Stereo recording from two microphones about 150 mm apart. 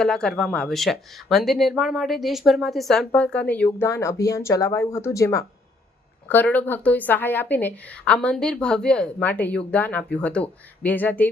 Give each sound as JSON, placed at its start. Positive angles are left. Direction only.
{"t": 0.0, "sound": "a woman's voice", "side_deg": 5}